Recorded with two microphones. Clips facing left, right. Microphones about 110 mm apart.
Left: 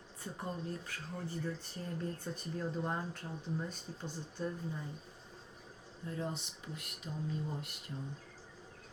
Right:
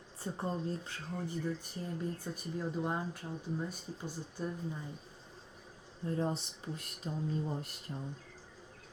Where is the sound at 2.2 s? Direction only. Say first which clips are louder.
Right 1 dB; 10° right (ahead or behind).